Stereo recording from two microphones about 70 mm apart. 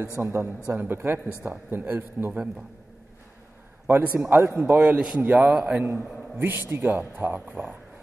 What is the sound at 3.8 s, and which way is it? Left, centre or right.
A man's voice, right.